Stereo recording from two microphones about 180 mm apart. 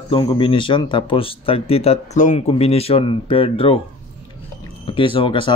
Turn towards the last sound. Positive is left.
turn(degrees=30)  # may be behind; listen again after turning